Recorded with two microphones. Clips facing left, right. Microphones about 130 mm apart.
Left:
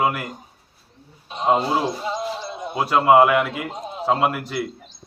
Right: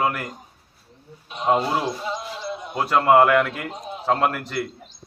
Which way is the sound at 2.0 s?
25° left (ahead or behind).